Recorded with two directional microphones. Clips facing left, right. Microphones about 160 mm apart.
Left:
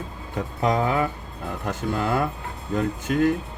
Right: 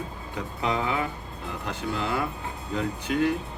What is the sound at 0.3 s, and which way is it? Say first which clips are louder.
Speech: left 5 dB; 45° left (ahead or behind).